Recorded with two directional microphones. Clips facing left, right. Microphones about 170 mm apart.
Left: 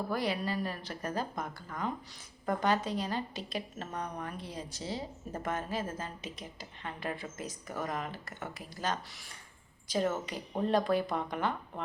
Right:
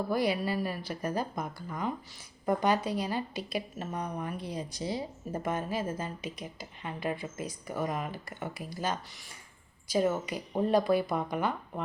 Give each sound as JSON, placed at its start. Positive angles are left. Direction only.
{"t": 0.1, "sound": "speech", "side_deg": -10}